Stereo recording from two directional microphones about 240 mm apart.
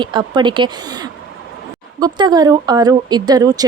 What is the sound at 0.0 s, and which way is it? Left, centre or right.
Speech, centre.